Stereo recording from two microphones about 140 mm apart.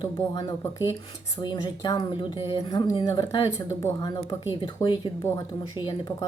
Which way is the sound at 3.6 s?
25° left (ahead or behind).